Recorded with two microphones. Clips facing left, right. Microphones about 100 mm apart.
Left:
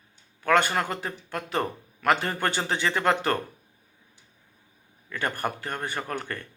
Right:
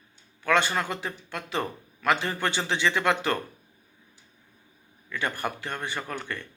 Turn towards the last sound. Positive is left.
turn(degrees=40)  # may be behind; listen again after turning